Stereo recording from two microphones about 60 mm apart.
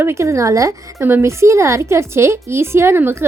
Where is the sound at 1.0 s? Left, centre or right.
Right.